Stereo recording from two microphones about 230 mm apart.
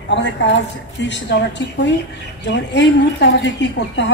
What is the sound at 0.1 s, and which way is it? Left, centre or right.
A woman's voice, left.